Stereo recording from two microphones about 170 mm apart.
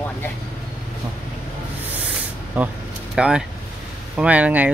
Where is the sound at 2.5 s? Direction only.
5° right (ahead or behind).